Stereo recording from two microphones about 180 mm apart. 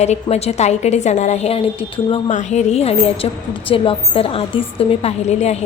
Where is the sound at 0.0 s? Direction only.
35° left (ahead or behind).